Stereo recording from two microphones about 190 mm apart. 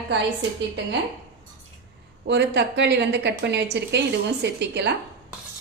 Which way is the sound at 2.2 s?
65° right (ahead or behind).